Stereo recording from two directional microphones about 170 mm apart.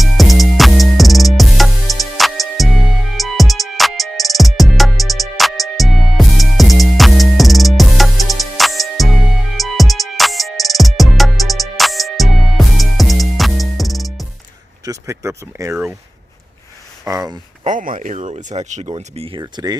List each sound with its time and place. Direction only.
0.0 s music: centre (ahead or behind)
14.8 s a sound: 20° right (ahead or behind)
17.1 s speech: 20° right (ahead or behind)
17.6 s speech: 50° right (ahead or behind); by 19.4 s 35° right (ahead or behind)
19.4 s speech: 25° right (ahead or behind)